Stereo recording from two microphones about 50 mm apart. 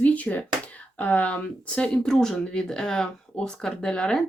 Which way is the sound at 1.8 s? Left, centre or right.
Centre.